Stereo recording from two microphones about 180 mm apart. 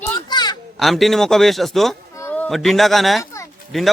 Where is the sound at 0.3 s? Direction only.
25° left (ahead or behind).